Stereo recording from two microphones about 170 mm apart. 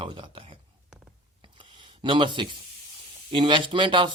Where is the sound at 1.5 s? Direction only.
30° right (ahead or behind).